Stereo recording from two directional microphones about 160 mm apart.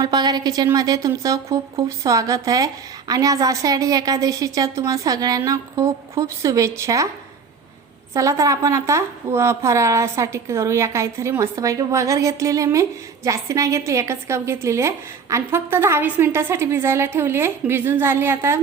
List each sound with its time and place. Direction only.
0.0 s a woman's voice: 25° right (ahead or behind)
8.1 s a woman's voice: 20° right (ahead or behind)